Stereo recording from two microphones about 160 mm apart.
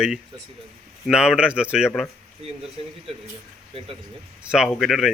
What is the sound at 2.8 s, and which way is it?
Speech, 35° right (ahead or behind).